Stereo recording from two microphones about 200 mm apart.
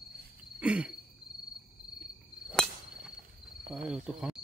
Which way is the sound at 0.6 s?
5° right (ahead or behind).